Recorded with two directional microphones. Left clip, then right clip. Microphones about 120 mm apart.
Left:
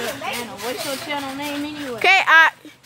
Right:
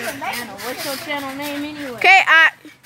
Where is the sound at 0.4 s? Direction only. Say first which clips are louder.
Even; 5° right (ahead or behind).